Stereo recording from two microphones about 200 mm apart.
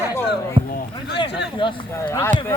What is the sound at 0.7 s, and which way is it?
Speech, 55° left (ahead or behind).